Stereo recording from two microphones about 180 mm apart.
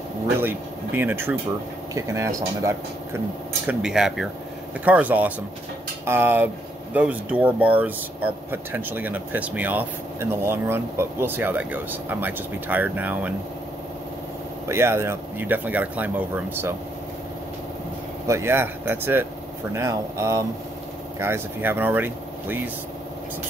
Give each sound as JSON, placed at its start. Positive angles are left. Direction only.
{"t": 0.4, "sound": "speech", "side_deg": -10}
{"t": 3.6, "sound": "speech", "side_deg": -5}
{"t": 14.7, "sound": "speech", "side_deg": -15}
{"t": 18.2, "sound": "speech", "side_deg": -15}